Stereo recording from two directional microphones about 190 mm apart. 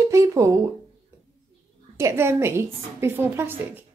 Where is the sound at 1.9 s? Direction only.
15° right (ahead or behind).